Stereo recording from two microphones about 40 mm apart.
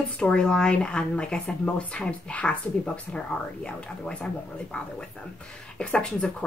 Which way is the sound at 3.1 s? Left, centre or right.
Left.